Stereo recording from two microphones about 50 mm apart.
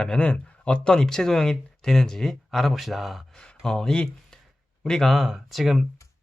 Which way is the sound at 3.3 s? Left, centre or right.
Centre.